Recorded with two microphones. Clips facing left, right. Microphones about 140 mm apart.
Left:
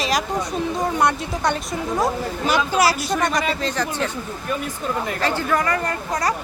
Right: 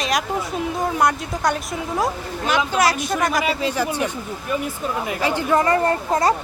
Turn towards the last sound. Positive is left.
turn(degrees=-25)  # may be behind; listen again after turning